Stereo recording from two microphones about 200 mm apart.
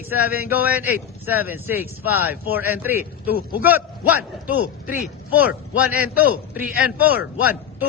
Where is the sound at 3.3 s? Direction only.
50° left (ahead or behind).